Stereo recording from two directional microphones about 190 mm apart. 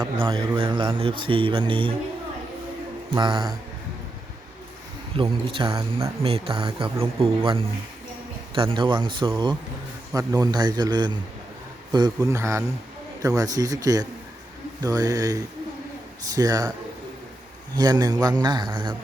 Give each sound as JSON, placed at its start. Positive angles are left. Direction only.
{"t": 0.0, "sound": "a man's voice", "side_deg": -25}
{"t": 3.2, "sound": "a man's voice", "side_deg": -25}
{"t": 5.1, "sound": "a man's voice", "side_deg": -25}
{"t": 17.7, "sound": "a man's voice", "side_deg": -20}